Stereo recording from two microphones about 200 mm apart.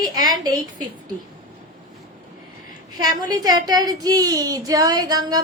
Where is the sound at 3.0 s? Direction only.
20° right (ahead or behind).